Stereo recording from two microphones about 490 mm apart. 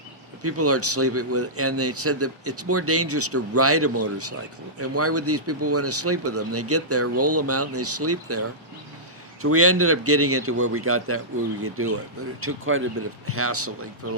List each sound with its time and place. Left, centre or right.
0.4 s speech: right